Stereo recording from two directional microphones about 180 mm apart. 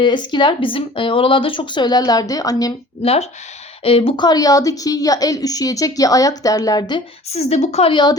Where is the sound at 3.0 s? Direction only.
35° left (ahead or behind).